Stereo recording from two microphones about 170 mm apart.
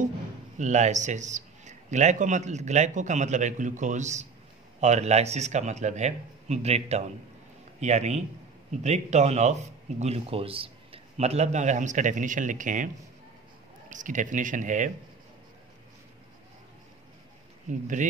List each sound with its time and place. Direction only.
0.6 s speech: 45° right (ahead or behind)
17.6 s speech: 50° right (ahead or behind)